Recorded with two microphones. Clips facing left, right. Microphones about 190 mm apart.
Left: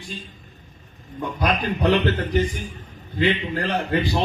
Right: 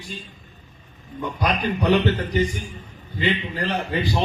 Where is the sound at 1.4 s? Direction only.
50° left (ahead or behind).